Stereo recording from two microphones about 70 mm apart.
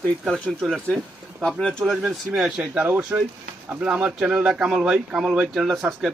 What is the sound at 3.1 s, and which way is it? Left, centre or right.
Speech, right.